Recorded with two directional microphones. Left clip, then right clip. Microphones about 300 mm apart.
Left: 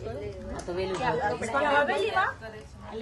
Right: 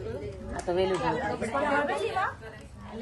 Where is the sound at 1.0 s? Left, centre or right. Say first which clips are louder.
Left 2 dB; left.